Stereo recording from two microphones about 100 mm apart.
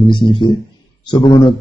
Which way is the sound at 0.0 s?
50° left (ahead or behind).